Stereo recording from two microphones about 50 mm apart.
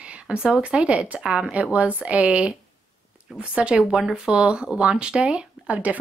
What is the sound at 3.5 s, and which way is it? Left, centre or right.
Speech, centre.